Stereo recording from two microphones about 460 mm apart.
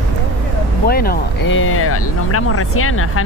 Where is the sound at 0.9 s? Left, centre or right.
Centre.